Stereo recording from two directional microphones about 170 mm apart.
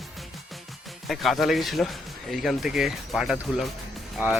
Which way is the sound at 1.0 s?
Centre (ahead or behind).